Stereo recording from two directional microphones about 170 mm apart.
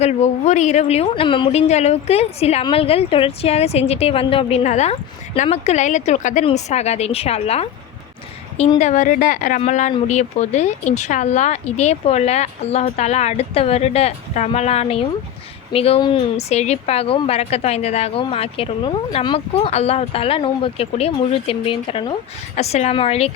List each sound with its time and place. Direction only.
0.0 s speech: 40° left (ahead or behind)
8.8 s a woman's voice: 45° left (ahead or behind); by 16.2 s 30° left (ahead or behind)
16.4 s speech: 40° left (ahead or behind)